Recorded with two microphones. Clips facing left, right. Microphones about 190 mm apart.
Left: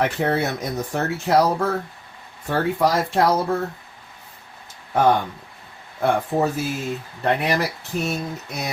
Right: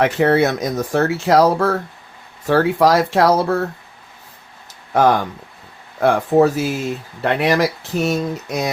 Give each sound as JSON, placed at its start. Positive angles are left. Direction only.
{"t": 0.0, "sound": "speech", "side_deg": -90}
{"t": 4.9, "sound": "speech", "side_deg": -90}